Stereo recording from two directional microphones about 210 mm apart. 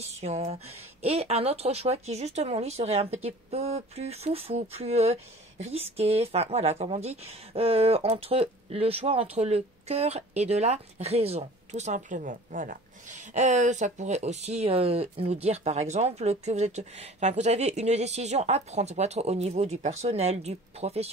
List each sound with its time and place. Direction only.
0.2 s speech: 30° right (ahead or behind)